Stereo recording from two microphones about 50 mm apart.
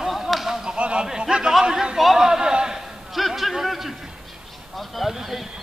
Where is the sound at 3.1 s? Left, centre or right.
Centre.